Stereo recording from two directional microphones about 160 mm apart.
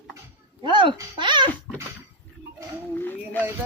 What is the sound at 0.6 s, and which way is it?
Speech, 30° right (ahead or behind).